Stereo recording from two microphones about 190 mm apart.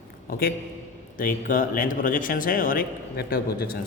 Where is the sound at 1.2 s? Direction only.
45° left (ahead or behind).